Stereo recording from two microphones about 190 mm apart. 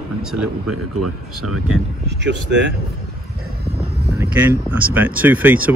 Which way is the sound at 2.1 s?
70° right (ahead or behind).